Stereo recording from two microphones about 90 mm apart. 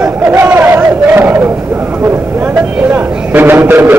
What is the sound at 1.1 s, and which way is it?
Battle cry, 25° right (ahead or behind).